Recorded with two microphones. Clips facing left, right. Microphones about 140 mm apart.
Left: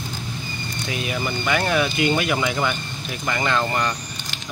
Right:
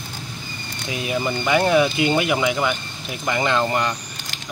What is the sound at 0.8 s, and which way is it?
Speech, 20° right (ahead or behind).